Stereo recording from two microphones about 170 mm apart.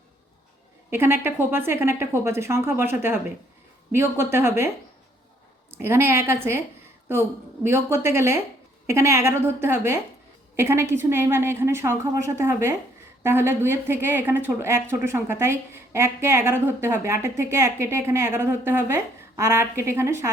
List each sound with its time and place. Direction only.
0.9 s speech: 15° right (ahead or behind)
3.9 s speech: 15° right (ahead or behind)
5.8 s speech: 15° right (ahead or behind)